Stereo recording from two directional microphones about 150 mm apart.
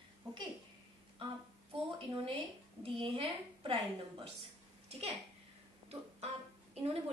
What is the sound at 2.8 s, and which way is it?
A woman's voice, 35° right (ahead or behind).